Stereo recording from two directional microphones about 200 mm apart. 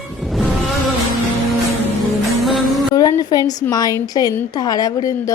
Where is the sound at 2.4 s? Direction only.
Centre (ahead or behind).